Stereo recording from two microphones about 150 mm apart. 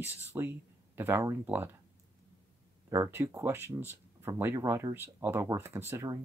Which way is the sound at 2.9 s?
15° right (ahead or behind).